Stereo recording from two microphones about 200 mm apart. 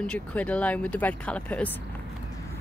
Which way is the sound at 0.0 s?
5° left (ahead or behind).